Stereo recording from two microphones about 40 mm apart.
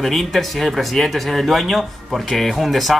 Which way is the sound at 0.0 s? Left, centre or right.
Centre.